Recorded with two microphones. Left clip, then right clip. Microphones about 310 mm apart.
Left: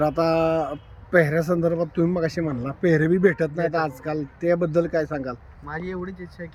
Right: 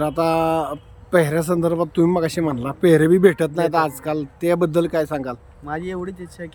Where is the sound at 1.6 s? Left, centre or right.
Centre.